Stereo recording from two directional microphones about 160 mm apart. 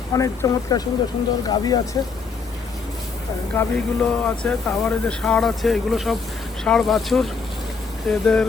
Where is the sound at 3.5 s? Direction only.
10° left (ahead or behind).